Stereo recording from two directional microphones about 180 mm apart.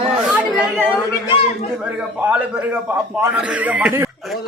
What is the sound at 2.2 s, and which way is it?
Speech, 10° right (ahead or behind).